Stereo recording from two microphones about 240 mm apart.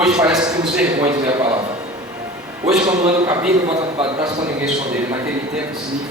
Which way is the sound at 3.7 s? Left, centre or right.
Right.